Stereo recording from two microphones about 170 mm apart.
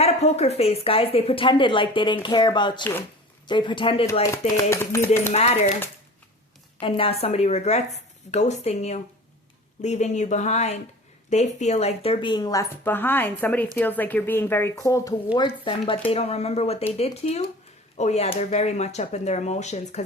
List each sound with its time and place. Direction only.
0.0 s speech: 40° left (ahead or behind)
4.2 s speech: 20° left (ahead or behind)
5.3 s speech: 40° left (ahead or behind)
6.7 s speech: 30° left (ahead or behind)
15.4 s speech: 30° left (ahead or behind)